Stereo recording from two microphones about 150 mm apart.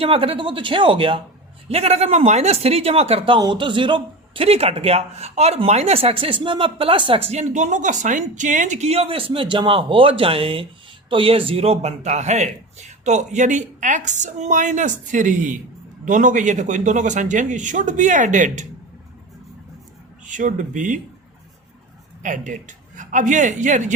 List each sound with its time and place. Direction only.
0.0 s a man's voice: 40° right (ahead or behind); by 18.6 s 55° right (ahead or behind)
20.2 s speech: 60° right (ahead or behind)
22.2 s a man's voice: 60° right (ahead or behind)